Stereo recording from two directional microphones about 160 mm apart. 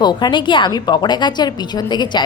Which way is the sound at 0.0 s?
25° left (ahead or behind).